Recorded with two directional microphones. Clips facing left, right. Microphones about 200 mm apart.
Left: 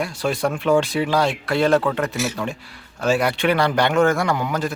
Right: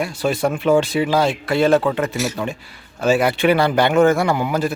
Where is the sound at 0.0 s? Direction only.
Centre (ahead or behind).